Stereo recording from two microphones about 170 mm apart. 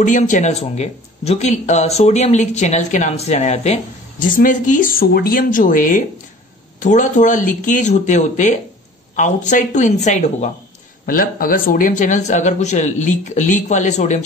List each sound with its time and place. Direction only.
0.0 s speech: 50° left (ahead or behind)
11.1 s speech: 55° left (ahead or behind)